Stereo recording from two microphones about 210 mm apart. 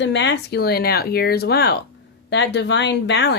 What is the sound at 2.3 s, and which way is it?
Speech, 55° left (ahead or behind).